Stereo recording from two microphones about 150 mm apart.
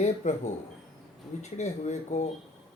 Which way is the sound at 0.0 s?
50° left (ahead or behind).